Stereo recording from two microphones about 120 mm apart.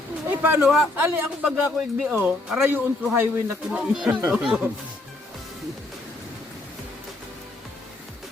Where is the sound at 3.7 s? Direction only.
5° right (ahead or behind).